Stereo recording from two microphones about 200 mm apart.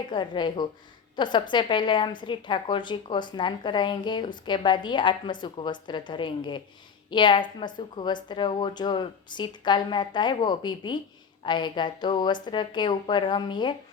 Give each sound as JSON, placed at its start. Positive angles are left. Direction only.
{"t": 0.1, "sound": "a woman's voice", "side_deg": 25}